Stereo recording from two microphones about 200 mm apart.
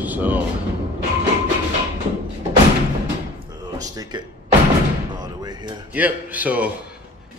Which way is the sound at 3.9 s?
20° right (ahead or behind).